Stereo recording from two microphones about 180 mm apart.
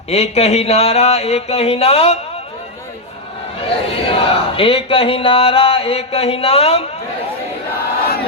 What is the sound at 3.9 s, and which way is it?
Chant, 30° left (ahead or behind).